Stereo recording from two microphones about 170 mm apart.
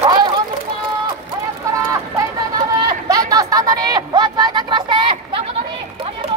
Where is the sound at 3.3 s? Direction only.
20° right (ahead or behind).